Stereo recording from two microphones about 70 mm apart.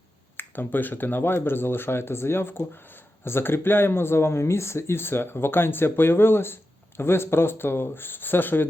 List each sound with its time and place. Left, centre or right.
0.3 s speech: left